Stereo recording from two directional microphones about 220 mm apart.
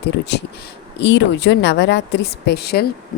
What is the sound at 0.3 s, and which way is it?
A woman's voice, 50° left (ahead or behind).